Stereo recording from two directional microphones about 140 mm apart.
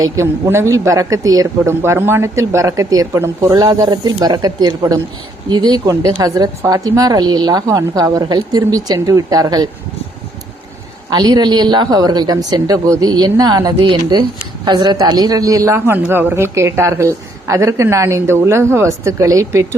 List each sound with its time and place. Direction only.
0.0 s speech: 20° right (ahead or behind)
11.1 s speech: 30° right (ahead or behind)